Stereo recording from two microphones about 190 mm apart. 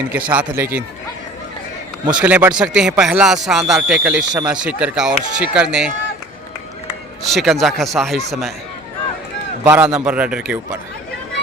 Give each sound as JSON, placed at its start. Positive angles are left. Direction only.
{"t": 0.3, "sound": "speech", "side_deg": -10}
{"t": 2.1, "sound": "speech", "side_deg": -10}
{"t": 7.2, "sound": "speech", "side_deg": 0}
{"t": 9.6, "sound": "speech", "side_deg": -5}